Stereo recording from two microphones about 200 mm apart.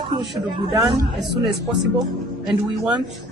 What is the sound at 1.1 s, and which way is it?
Speech, centre (ahead or behind).